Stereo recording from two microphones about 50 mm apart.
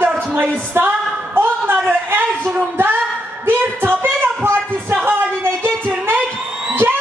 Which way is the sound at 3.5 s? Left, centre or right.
Right.